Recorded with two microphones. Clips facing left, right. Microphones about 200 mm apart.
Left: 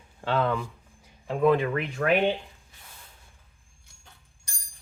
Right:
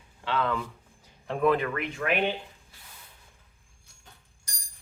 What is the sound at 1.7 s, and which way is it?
Speech, 35° left (ahead or behind).